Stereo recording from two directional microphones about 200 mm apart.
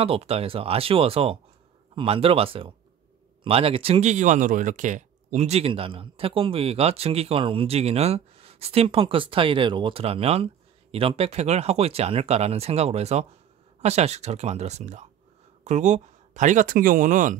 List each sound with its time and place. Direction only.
0.0 s speech: 30° right (ahead or behind)